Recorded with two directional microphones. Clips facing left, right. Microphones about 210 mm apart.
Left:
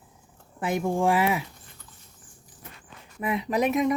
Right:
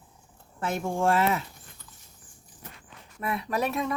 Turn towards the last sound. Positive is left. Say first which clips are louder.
# left 5 dB
turn(degrees=15)  # may be behind; listen again after turning